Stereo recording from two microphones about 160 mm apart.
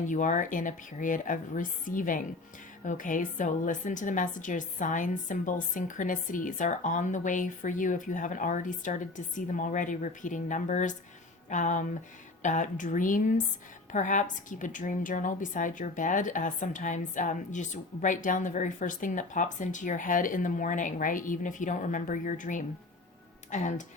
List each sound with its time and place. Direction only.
0.1 s a woman's voice: 50° left (ahead or behind)